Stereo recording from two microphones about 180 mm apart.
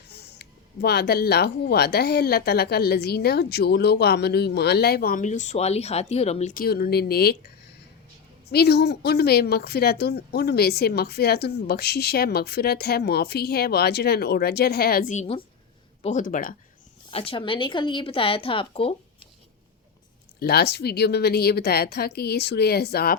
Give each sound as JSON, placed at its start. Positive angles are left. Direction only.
{"t": 0.1, "sound": "a woman's voice", "side_deg": 65}
{"t": 6.5, "sound": "a woman's voice", "side_deg": 55}
{"t": 8.4, "sound": "a woman's voice", "side_deg": 65}
{"t": 17.1, "sound": "a woman's voice", "side_deg": 30}
{"t": 20.4, "sound": "a woman's voice", "side_deg": 60}